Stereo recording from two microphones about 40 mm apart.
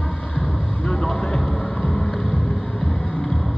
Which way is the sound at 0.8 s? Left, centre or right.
Centre.